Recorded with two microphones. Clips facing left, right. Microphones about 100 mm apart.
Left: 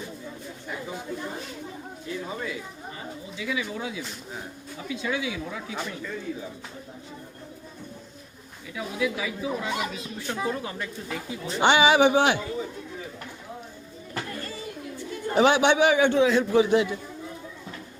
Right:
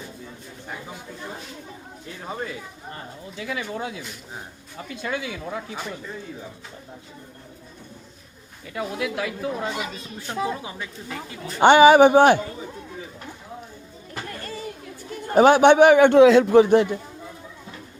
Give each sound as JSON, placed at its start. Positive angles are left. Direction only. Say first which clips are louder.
{"t": 3.3, "sound": "speech", "louder": "right 1 dB", "side_deg": -50}
{"t": 8.7, "sound": "a man's voice", "louder": "right 1 dB", "side_deg": -60}
{"t": 10.6, "sound": "speech", "louder": "left 1 dB", "side_deg": -15}
{"t": 11.6, "sound": "speech", "louder": "right 7 dB", "side_deg": -45}
{"t": 15.3, "sound": "a man's voice", "louder": "right 6 dB", "side_deg": -45}
{"t": 16.5, "sound": "speech", "louder": "right 6 dB", "side_deg": -50}